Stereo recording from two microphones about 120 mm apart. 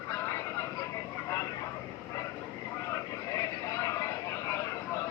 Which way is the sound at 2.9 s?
25° left (ahead or behind).